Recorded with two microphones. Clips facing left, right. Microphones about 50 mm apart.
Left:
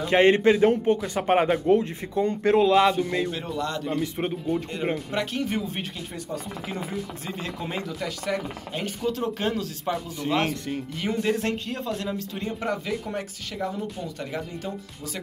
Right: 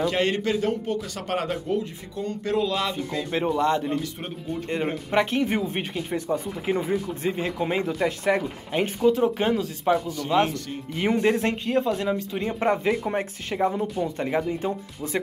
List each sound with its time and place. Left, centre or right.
0.0 s a man's voice: left
3.3 s speech: right
4.0 s speech: centre
5.1 s speech: right
9.0 s speech: centre
11.0 s speech: right
12.5 s speech: right